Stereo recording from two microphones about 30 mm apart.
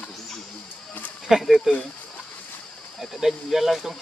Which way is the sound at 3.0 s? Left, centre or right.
Centre.